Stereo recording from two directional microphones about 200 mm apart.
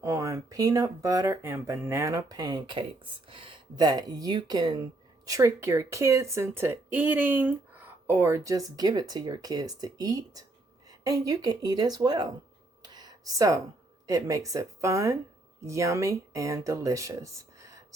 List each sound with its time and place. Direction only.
0.0 s speech: 15° right (ahead or behind)
12.8 s a sound: 20° right (ahead or behind)
14.1 s speech: 15° right (ahead or behind)